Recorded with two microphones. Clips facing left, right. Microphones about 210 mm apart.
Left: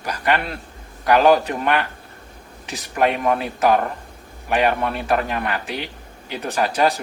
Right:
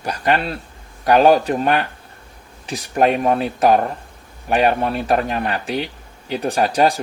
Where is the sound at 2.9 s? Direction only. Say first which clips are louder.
Right 3 dB; 35° right (ahead or behind).